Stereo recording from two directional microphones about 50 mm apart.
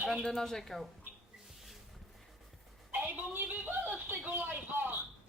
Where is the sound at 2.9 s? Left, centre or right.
Right.